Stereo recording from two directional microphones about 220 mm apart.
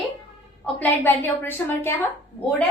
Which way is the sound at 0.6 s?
10° left (ahead or behind).